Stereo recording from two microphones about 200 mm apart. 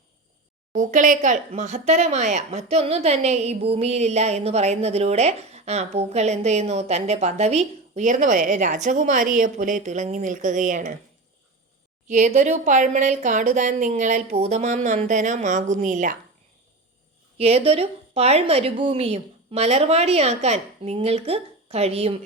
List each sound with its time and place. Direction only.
0.7 s speech: 40° right (ahead or behind)
12.0 s speech: 35° right (ahead or behind)
17.3 s speech: 30° right (ahead or behind)